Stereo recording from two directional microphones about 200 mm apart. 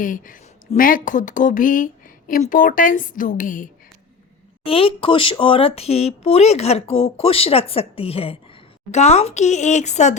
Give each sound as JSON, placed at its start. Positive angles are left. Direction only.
{"t": 0.0, "sound": "speech", "side_deg": 40}
{"t": 4.6, "sound": "speech", "side_deg": 30}